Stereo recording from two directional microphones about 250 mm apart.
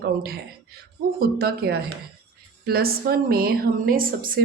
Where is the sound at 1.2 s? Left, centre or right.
Right.